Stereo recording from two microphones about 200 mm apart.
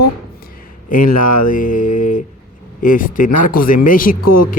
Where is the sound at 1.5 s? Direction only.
40° left (ahead or behind).